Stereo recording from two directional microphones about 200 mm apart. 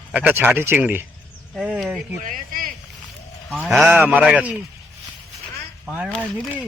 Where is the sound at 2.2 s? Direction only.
40° right (ahead or behind).